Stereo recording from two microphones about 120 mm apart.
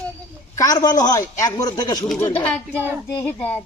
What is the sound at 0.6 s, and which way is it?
A man's voice, 30° left (ahead or behind).